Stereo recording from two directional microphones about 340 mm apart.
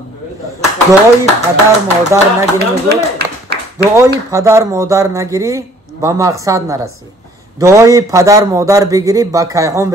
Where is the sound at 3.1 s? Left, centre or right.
Right.